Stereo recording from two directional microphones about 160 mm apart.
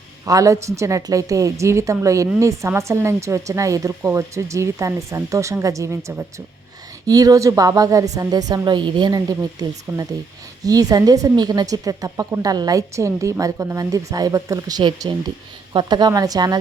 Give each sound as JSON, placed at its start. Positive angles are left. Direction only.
{"t": 0.3, "sound": "a woman's voice", "side_deg": -20}